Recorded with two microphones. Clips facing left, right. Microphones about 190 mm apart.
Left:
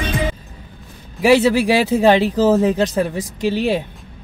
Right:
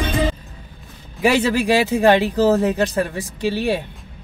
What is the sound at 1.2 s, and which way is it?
A man's voice, 10° left (ahead or behind).